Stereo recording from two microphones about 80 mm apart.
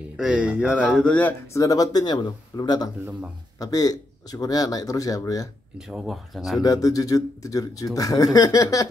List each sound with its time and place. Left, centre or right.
0.2 s speech: centre
1.0 s speech: left
1.5 s speech: left
5.8 s speech: centre
6.6 s speech: left